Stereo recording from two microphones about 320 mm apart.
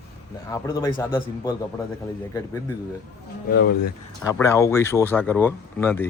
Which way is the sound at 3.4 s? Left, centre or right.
Left.